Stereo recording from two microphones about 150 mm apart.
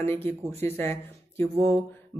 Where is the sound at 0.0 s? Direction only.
15° left (ahead or behind).